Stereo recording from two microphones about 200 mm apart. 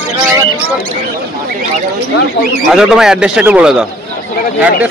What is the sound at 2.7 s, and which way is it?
A man's voice, 5° right (ahead or behind).